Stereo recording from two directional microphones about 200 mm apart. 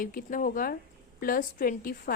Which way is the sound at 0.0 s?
45° left (ahead or behind).